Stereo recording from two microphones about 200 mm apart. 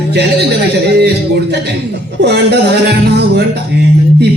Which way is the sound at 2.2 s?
55° right (ahead or behind).